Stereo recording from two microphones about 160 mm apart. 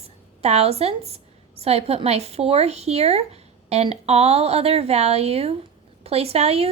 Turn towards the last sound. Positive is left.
turn(degrees=-40)  # may be behind; listen again after turning